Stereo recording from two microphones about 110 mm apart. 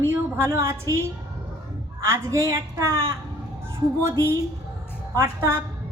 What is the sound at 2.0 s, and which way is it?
Speech, 25° right (ahead or behind).